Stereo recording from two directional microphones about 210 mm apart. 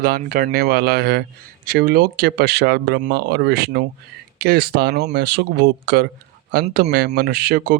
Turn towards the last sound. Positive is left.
turn(degrees=-45)  # may be behind; listen again after turning